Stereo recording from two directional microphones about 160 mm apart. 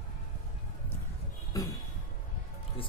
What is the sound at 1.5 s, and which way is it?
Speech, 20° left (ahead or behind).